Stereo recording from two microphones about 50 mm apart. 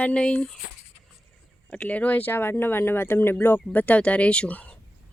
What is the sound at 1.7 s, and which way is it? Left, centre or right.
Speech, left.